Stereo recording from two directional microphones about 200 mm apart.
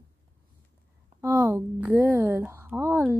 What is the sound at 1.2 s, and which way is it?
Speech, 15° right (ahead or behind).